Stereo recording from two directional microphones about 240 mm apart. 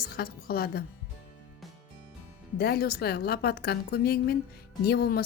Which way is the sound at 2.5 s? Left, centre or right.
Left.